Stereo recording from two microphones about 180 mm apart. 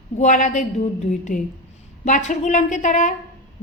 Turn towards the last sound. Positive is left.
turn(degrees=45)  # may be behind; listen again after turning